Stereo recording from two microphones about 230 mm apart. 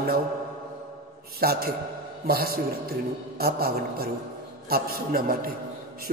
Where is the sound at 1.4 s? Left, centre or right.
Right.